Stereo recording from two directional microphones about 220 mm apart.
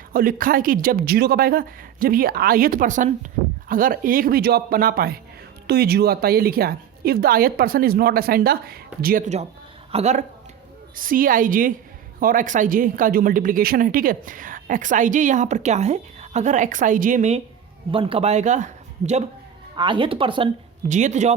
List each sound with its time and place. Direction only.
0.1 s a woman's voice: 40° right (ahead or behind)
19.7 s speech: 20° right (ahead or behind)